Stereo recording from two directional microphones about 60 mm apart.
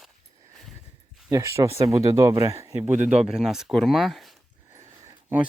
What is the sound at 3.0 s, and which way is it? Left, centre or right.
Speech, centre.